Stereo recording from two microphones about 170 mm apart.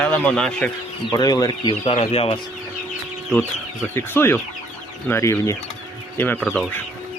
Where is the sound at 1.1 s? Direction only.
25° left (ahead or behind).